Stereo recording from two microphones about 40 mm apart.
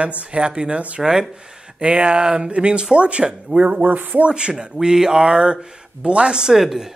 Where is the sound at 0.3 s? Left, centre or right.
Right.